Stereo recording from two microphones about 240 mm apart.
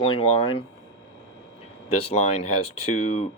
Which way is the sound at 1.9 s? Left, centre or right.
Left.